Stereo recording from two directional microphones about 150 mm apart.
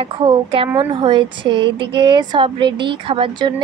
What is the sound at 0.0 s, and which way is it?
A woman's voice, 35° right (ahead or behind).